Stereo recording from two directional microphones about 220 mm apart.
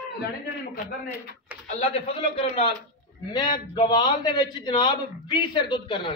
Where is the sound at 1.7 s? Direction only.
30° left (ahead or behind).